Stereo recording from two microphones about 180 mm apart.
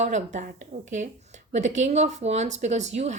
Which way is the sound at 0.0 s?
40° right (ahead or behind).